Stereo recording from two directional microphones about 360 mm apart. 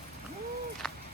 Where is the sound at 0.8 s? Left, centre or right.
Centre.